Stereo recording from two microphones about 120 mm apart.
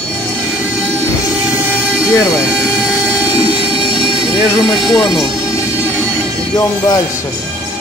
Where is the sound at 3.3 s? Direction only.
50° right (ahead or behind).